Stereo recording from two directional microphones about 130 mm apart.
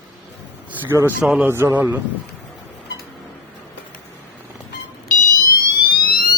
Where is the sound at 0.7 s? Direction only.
15° right (ahead or behind).